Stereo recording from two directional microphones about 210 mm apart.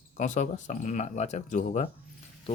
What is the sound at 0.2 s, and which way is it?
Speech, 35° left (ahead or behind).